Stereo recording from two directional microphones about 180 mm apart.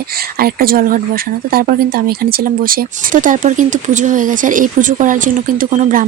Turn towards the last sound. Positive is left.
turn(degrees=-45)  # may be behind; listen again after turning